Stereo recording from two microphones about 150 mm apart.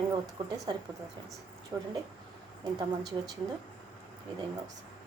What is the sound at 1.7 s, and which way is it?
Speech, 25° right (ahead or behind).